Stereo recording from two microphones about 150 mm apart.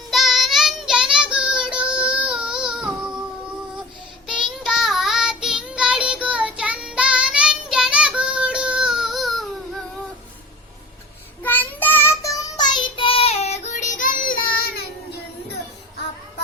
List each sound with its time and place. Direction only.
0.1 s child singing: centre (ahead or behind)
4.3 s child singing: 5° right (ahead or behind)
11.4 s child singing: 10° left (ahead or behind); by 14.8 s 75° left (ahead or behind)